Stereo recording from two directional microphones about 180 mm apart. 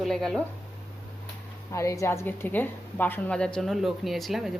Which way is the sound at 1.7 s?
15° left (ahead or behind).